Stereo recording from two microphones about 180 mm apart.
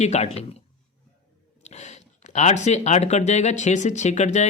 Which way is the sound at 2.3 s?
40° left (ahead or behind).